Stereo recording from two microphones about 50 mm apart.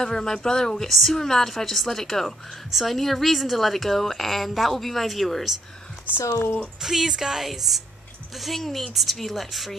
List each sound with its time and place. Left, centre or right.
0.0 s a woman's voice: centre
6.4 s speech: left
6.8 s a woman's voice: centre